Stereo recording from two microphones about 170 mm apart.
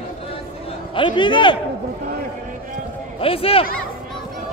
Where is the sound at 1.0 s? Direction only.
30° left (ahead or behind).